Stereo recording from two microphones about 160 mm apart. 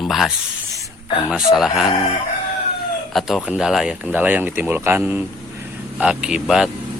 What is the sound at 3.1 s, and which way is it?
Speech, centre (ahead or behind).